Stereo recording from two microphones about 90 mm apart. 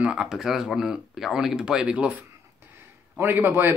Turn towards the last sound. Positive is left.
turn(degrees=-20)  # may be behind; listen again after turning